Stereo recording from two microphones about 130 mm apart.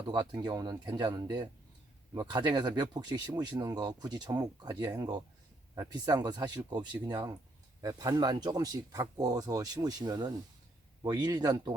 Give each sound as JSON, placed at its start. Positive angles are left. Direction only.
{"t": 0.0, "sound": "speech", "side_deg": -30}